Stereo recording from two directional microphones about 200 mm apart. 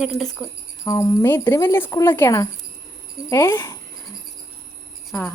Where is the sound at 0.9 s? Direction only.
15° left (ahead or behind).